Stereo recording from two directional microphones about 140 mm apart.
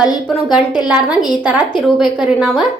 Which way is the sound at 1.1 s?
30° left (ahead or behind).